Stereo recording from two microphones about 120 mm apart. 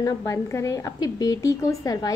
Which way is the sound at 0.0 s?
25° left (ahead or behind).